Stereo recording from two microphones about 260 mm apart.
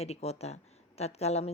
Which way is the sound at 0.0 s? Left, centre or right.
Left.